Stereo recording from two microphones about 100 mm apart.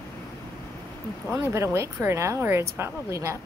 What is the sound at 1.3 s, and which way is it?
A woman's voice, 25° right (ahead or behind).